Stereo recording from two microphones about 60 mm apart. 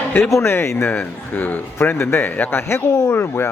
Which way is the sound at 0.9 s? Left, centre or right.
Left.